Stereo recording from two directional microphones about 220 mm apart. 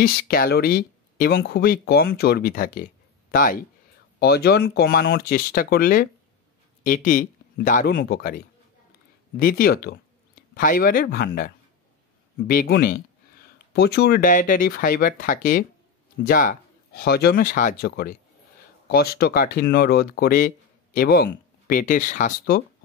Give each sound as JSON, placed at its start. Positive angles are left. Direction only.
{"t": 0.0, "sound": "speech", "side_deg": 40}